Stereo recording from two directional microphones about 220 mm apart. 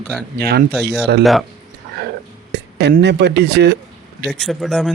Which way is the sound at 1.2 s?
Centre (ahead or behind).